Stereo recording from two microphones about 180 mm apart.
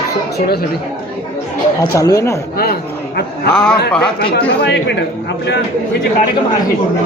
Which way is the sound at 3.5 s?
5° left (ahead or behind).